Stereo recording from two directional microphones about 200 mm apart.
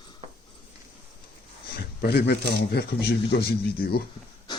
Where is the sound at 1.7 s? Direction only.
55° left (ahead or behind).